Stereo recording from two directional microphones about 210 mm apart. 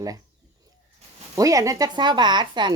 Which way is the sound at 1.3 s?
15° right (ahead or behind).